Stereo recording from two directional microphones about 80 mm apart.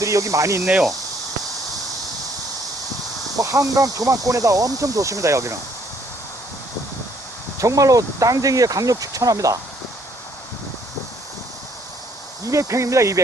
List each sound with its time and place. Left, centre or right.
0.0 s speech: right
0.6 s speech: centre
3.3 s speech: right
7.6 s speech: right
12.5 s speech: right